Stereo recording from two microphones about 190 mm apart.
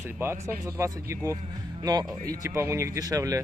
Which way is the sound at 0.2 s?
15° right (ahead or behind).